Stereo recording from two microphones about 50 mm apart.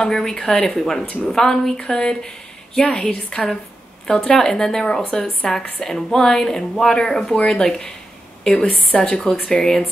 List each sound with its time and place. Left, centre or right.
0.0 s a woman's voice: centre
8.9 s a woman's voice: centre